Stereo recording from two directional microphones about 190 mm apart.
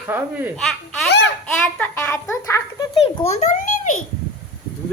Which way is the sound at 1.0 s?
60° left (ahead or behind).